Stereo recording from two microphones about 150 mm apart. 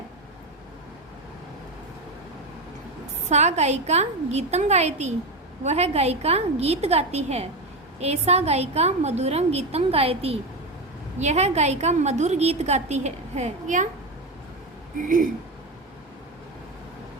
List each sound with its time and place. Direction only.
3.2 s a woman's voice: 50° right (ahead or behind)